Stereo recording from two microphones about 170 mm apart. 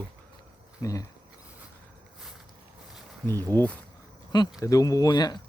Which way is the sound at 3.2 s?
15° left (ahead or behind).